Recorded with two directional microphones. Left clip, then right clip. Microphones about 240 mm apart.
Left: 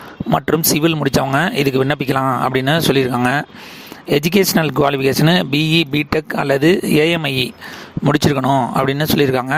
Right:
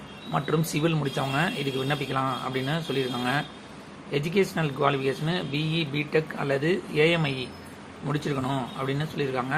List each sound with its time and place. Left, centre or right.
0.3 s speech: left